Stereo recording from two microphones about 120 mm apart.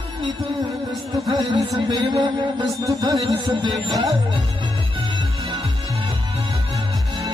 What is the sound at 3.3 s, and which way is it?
Speech, 40° right (ahead or behind).